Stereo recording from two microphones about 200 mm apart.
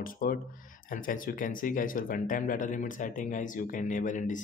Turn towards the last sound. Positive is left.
turn(degrees=40)  # may be behind; listen again after turning